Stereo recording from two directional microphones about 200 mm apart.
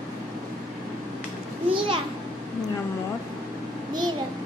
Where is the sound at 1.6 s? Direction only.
25° right (ahead or behind).